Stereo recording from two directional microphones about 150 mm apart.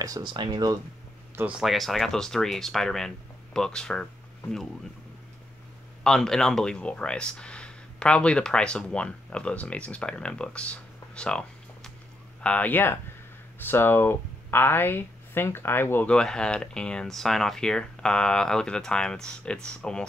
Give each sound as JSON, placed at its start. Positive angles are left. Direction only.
{"t": 0.0, "sound": "speech", "side_deg": -25}
{"t": 1.3, "sound": "speech", "side_deg": -10}
{"t": 6.0, "sound": "speech", "side_deg": 5}